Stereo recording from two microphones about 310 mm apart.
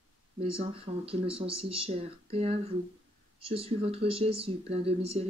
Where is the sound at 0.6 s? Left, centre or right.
Centre.